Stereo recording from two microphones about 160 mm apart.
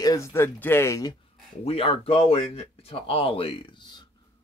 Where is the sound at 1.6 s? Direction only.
40° left (ahead or behind).